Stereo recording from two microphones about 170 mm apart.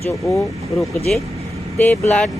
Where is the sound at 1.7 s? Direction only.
10° left (ahead or behind).